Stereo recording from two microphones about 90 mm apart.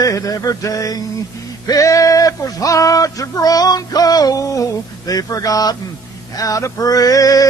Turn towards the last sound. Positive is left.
turn(degrees=40)  # may be behind; listen again after turning